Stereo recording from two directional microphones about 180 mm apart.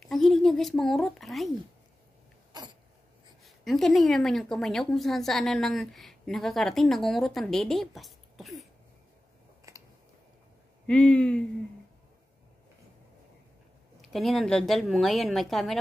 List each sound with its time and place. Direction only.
0.0 s a sound: centre (ahead or behind)
2.5 s throat clearing: 25° right (ahead or behind)
3.4 s a woman's voice: centre (ahead or behind)
9.7 s a sound: 20° right (ahead or behind)
10.9 s a woman's voice: 5° left (ahead or behind)
14.1 s a woman's voice: centre (ahead or behind)